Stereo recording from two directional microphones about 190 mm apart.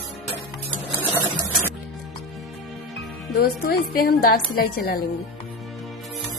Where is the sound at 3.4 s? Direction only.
50° left (ahead or behind).